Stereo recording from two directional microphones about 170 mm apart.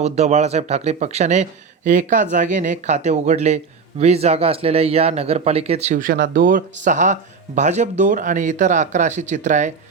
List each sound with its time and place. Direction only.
0.0 s speech: 40° right (ahead or behind)
6.0 s speech: 55° right (ahead or behind)